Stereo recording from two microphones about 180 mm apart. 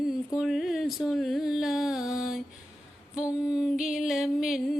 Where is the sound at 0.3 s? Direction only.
Centre (ahead or behind).